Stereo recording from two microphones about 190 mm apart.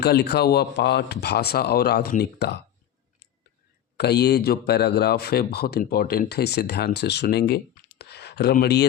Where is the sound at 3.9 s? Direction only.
60° left (ahead or behind).